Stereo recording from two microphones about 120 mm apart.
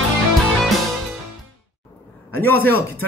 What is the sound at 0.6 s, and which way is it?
Music, centre (ahead or behind).